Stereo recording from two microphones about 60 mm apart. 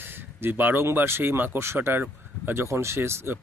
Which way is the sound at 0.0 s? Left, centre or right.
Right.